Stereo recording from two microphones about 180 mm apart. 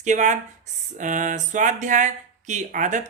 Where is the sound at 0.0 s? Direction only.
45° right (ahead or behind).